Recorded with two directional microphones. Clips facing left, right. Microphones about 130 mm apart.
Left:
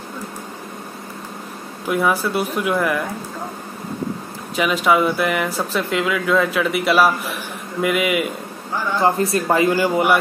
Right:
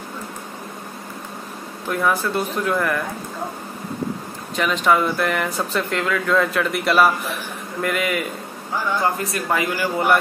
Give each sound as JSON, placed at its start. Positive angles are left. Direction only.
{"t": 1.9, "sound": "speech", "side_deg": 10}
{"t": 4.6, "sound": "speech", "side_deg": 5}
{"t": 9.0, "sound": "speech", "side_deg": 30}
{"t": 9.8, "sound": "speech", "side_deg": 15}